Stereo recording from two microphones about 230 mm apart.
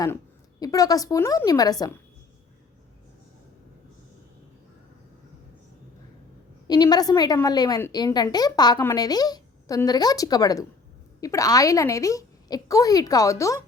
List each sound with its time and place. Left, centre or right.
0.6 s a woman's voice: centre
6.7 s a woman's voice: centre